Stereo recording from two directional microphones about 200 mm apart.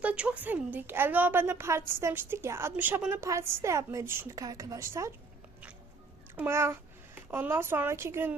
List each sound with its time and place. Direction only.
0.0 s a woman's voice: 5° right (ahead or behind)
6.3 s a woman's voice: 10° right (ahead or behind)